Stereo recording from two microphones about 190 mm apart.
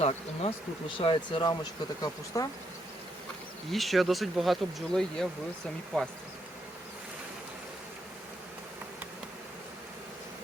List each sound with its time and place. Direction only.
0.0 s speech: 30° left (ahead or behind)
3.7 s speech: centre (ahead or behind)